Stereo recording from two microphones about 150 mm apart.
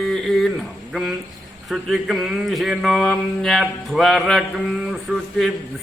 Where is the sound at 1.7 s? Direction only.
Centre (ahead or behind).